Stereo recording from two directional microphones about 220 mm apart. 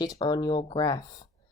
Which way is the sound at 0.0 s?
20° left (ahead or behind).